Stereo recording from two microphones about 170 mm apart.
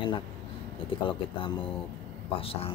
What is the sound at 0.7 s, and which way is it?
Speech, 30° left (ahead or behind).